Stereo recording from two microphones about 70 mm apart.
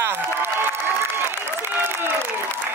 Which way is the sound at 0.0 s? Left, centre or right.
Right.